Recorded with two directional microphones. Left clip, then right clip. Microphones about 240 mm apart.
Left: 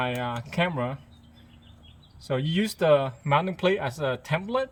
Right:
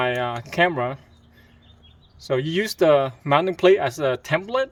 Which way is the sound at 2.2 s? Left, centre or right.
Right.